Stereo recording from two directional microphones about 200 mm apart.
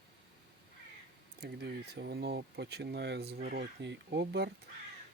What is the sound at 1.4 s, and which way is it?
Speech, 55° right (ahead or behind).